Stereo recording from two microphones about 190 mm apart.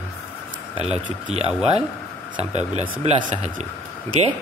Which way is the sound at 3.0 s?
35° right (ahead or behind).